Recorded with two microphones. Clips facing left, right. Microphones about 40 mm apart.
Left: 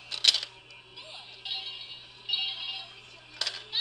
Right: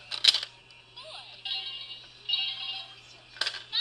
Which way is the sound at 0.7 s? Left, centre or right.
Centre.